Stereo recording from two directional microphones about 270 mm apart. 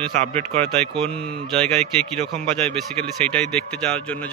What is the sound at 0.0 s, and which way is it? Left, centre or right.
Speech, right.